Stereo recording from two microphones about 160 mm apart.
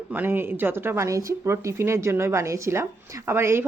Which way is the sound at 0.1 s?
15° right (ahead or behind).